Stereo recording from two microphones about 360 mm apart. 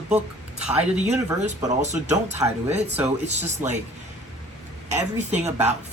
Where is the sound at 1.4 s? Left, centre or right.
Centre.